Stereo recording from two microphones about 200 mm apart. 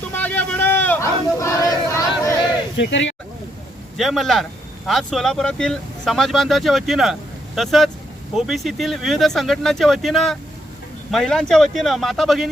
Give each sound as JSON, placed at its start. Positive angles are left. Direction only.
{"t": 0.1, "sound": "a sound", "side_deg": 10}
{"t": 2.7, "sound": "speech", "side_deg": 65}
{"t": 3.9, "sound": "speech", "side_deg": 0}